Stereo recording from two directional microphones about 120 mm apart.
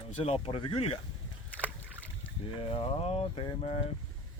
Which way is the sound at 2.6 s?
50° left (ahead or behind).